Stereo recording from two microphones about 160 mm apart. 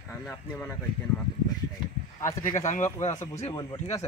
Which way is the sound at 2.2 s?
15° left (ahead or behind).